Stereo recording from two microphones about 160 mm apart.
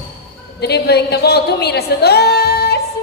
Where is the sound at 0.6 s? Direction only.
90° left.